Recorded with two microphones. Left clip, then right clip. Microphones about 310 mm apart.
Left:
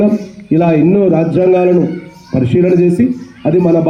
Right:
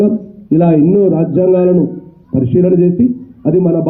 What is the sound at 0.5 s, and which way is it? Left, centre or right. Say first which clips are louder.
A man's voice: even; left.